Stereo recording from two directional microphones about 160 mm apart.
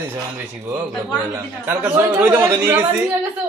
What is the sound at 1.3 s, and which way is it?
Speech, 10° right (ahead or behind).